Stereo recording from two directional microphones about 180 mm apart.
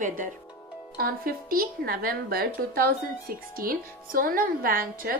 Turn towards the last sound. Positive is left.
turn(degrees=-50)  # may be behind; listen again after turning